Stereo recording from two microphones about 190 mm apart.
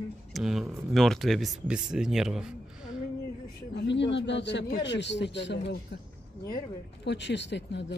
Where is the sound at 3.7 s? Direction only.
65° left (ahead or behind).